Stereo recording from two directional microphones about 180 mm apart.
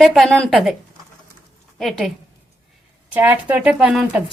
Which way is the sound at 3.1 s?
10° right (ahead or behind).